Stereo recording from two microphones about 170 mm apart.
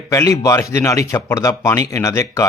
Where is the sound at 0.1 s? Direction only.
20° left (ahead or behind).